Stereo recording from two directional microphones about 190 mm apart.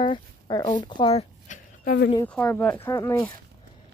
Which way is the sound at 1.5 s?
40° left (ahead or behind).